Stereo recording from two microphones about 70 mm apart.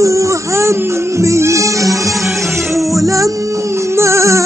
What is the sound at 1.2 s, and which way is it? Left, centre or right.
Music, right.